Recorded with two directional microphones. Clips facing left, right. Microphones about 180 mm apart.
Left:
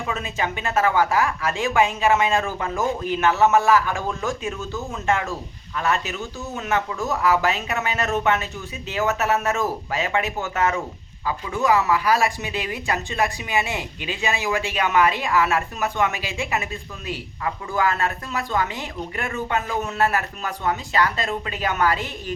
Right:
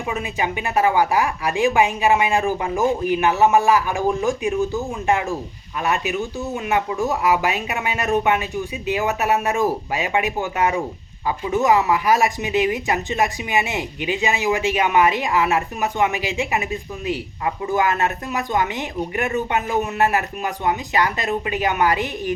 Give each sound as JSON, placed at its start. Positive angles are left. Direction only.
{"t": 0.1, "sound": "speech", "side_deg": -15}